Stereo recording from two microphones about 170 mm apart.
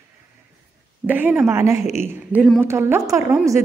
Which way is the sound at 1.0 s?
10° right (ahead or behind).